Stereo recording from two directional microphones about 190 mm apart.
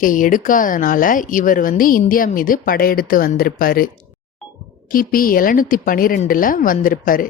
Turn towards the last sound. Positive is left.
turn(degrees=45)  # may be behind; listen again after turning